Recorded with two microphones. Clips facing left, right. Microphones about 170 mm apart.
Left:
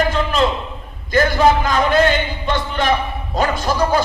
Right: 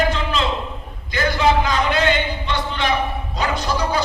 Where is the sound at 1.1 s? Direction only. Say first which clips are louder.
Left 4 dB; 50° left (ahead or behind).